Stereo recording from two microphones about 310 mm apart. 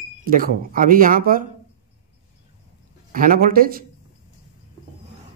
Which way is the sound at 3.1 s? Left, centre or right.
Right.